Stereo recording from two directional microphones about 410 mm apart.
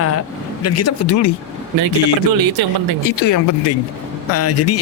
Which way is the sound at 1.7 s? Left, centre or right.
Right.